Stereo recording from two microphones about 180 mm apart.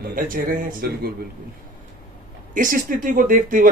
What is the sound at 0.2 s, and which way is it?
Speech, 50° right (ahead or behind).